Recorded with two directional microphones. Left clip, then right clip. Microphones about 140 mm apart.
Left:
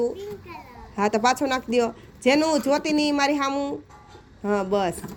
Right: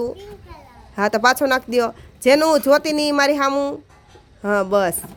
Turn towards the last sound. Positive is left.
turn(degrees=-55)  # may be behind; listen again after turning